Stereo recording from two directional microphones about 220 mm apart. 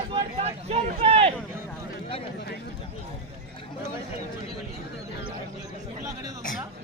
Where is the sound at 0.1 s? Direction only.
30° right (ahead or behind).